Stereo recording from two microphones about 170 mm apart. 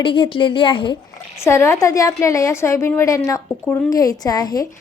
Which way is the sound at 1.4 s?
15° left (ahead or behind).